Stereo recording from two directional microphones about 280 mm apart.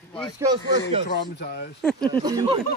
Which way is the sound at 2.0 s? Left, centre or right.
Centre.